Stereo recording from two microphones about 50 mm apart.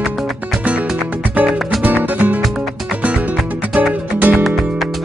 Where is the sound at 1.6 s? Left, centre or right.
Centre.